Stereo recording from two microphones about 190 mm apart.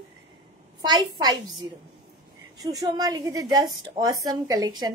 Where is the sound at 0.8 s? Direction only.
20° right (ahead or behind).